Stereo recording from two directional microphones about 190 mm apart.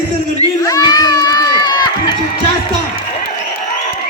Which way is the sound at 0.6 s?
20° left (ahead or behind).